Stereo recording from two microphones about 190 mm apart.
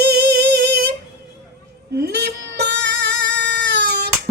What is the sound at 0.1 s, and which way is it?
Singing, 60° right (ahead or behind).